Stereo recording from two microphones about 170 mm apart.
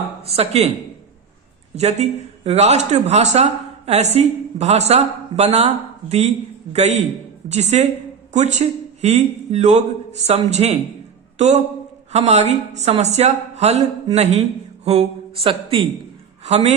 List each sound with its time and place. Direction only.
0.2 s speech: 35° right (ahead or behind)
1.7 s speech: 40° right (ahead or behind)